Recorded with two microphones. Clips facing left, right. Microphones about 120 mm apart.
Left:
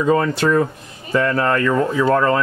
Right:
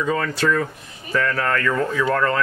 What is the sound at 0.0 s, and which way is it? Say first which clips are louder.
Speech: left 5 dB; 30° left (ahead or behind).